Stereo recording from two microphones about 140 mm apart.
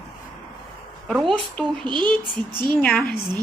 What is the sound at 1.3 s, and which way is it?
Speech, 5° left (ahead or behind).